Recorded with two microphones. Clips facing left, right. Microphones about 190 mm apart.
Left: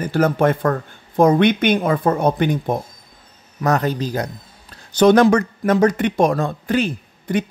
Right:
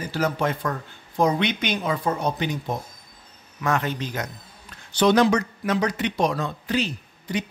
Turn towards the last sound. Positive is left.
turn(degrees=55)  # may be behind; listen again after turning